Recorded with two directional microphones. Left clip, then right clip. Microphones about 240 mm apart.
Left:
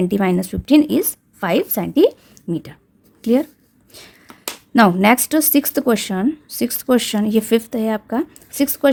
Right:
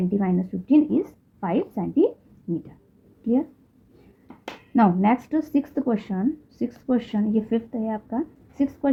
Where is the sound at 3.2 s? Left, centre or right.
Left.